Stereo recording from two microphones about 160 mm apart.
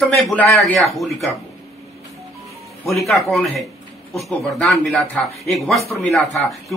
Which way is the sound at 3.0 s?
20° left (ahead or behind).